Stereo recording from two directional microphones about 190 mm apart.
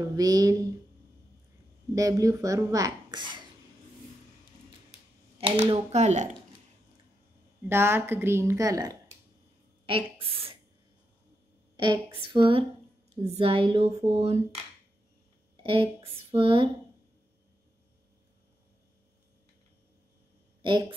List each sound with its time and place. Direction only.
0.0 s speech: 20° right (ahead or behind)
2.0 s speech: 15° right (ahead or behind)
5.4 s speech: 30° right (ahead or behind)
7.6 s a woman's voice: 10° right (ahead or behind)
9.8 s a woman's voice: 30° right (ahead or behind)
11.8 s speech: 25° right (ahead or behind)
15.5 s speech: 25° right (ahead or behind)